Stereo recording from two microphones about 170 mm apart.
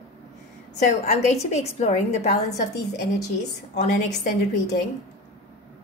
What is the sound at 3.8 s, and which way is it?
Speech, 45° left (ahead or behind).